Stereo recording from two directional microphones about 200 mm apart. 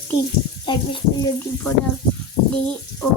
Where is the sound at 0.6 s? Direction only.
25° left (ahead or behind).